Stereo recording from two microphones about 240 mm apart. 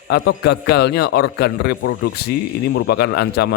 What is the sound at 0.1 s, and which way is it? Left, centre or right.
A man's voice, left.